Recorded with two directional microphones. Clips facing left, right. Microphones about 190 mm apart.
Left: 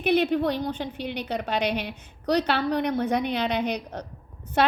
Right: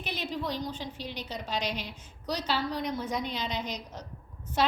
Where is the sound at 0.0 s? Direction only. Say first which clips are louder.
Left 13 dB; 60° left (ahead or behind).